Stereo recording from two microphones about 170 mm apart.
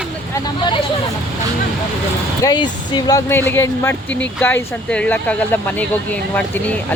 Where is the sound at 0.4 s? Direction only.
25° left (ahead or behind).